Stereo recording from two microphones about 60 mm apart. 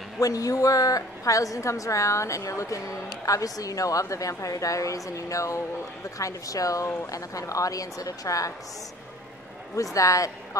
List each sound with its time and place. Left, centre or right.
0.2 s a woman's voice: left
3.3 s a woman's voice: left
9.9 s a woman's voice: left